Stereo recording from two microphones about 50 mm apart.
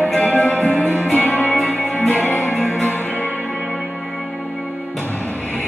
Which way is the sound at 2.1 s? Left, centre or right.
Left.